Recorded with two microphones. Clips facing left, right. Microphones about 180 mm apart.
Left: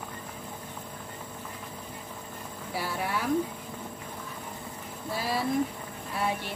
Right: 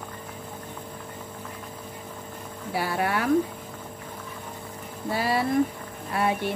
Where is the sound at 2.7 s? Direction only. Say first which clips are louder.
Right 6 dB; 65° right (ahead or behind).